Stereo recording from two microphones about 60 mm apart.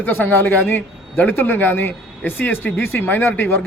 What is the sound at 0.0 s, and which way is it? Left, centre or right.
A man's voice, left.